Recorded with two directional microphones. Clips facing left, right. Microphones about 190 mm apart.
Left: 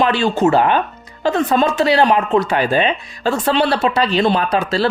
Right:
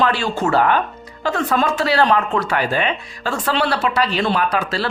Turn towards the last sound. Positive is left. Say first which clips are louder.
# left 4 dB
turn(degrees=25)  # may be behind; listen again after turning